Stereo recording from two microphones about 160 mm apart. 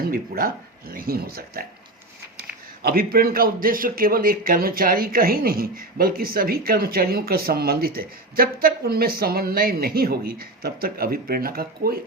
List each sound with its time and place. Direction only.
0.1 s a man's voice: 65° right (ahead or behind)
2.8 s a man's voice: 70° right (ahead or behind)